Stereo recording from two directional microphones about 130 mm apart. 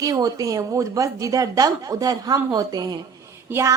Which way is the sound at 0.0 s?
30° right (ahead or behind).